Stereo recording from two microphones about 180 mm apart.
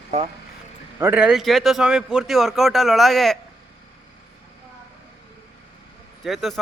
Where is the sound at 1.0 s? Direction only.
5° right (ahead or behind).